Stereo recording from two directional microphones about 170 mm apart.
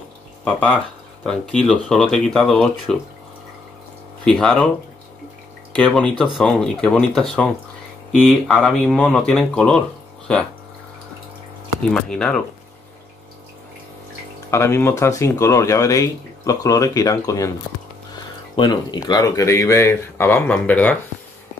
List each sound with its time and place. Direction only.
0.5 s speech: 10° left (ahead or behind)
4.2 s speech: 5° left (ahead or behind)
5.8 s speech: 5° left (ahead or behind)
11.9 s speech: 5° left (ahead or behind)
14.5 s speech: 15° left (ahead or behind)
18.6 s speech: 25° left (ahead or behind); by 21.0 s 10° left (ahead or behind)